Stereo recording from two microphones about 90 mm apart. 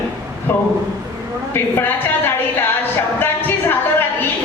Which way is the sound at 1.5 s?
25° left (ahead or behind).